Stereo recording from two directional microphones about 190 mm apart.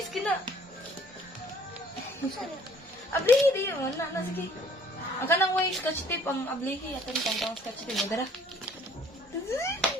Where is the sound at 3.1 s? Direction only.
10° left (ahead or behind).